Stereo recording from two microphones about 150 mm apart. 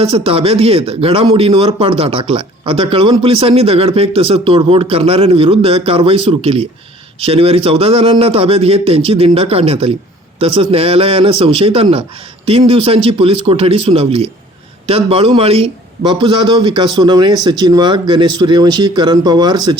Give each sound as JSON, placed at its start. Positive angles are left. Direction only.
{"t": 0.0, "sound": "a man's voice", "side_deg": -40}